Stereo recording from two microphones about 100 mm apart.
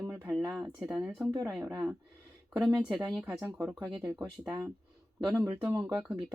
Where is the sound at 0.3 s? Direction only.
5° right (ahead or behind).